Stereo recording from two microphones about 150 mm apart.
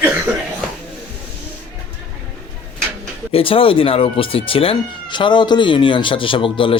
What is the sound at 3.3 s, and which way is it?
Speech, 35° left (ahead or behind).